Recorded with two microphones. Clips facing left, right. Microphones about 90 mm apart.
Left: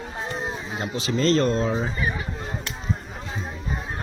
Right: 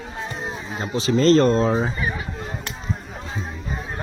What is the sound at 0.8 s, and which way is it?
Speech, 30° right (ahead or behind).